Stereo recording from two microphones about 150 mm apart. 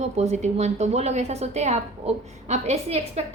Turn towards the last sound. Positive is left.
turn(degrees=-45)  # may be behind; listen again after turning